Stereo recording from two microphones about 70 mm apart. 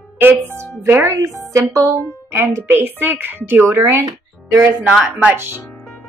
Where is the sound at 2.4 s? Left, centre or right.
Right.